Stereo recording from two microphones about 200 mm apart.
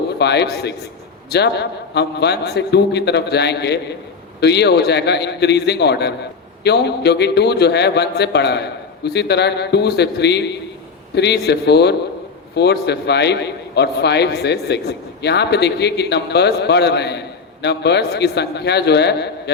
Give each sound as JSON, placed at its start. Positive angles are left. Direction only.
{"t": 0.2, "sound": "a man's voice", "side_deg": 55}